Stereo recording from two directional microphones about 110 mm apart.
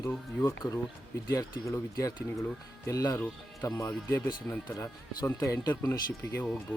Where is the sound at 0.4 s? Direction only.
30° left (ahead or behind).